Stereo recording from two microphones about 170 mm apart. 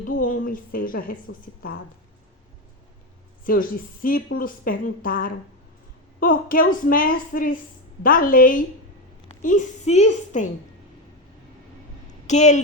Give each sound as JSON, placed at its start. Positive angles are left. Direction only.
{"t": 0.0, "sound": "a woman's voice", "side_deg": 55}
{"t": 3.4, "sound": "a woman's voice", "side_deg": 55}
{"t": 12.3, "sound": "a woman's voice", "side_deg": 45}